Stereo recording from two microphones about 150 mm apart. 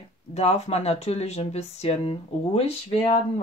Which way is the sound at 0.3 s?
45° left (ahead or behind).